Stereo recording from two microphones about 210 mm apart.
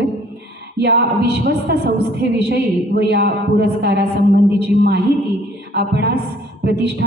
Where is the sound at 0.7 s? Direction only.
55° right (ahead or behind).